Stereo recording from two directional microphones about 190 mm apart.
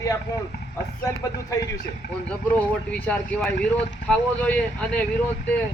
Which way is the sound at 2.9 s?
5° left (ahead or behind).